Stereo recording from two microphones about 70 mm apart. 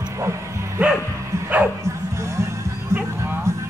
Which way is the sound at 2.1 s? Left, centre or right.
Right.